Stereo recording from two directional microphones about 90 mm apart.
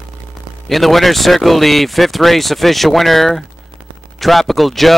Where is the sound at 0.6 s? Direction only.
Centre (ahead or behind).